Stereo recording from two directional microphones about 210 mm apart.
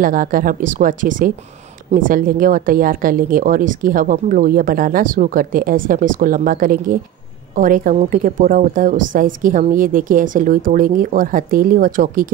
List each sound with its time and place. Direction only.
0.0 s a woman's voice: 40° right (ahead or behind)